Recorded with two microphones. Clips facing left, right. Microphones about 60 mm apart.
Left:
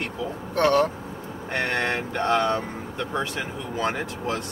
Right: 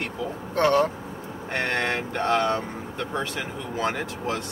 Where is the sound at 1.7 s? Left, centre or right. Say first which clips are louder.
Even; centre.